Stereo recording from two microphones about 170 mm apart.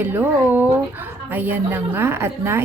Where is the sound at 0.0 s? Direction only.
10° right (ahead or behind).